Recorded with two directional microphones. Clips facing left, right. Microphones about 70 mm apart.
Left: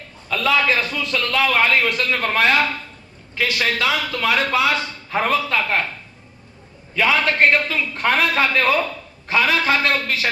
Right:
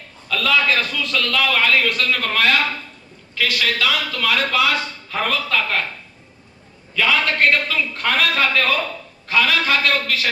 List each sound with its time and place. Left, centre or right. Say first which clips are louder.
0.3 s a man's voice: even; left
7.0 s a man's voice: left 1 dB; left